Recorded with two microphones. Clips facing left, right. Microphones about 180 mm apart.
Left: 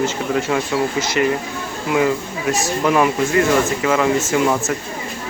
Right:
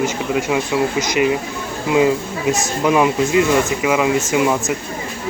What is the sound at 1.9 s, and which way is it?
Speech, 20° right (ahead or behind).